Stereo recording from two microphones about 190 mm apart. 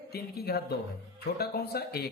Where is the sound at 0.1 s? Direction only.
55° left (ahead or behind).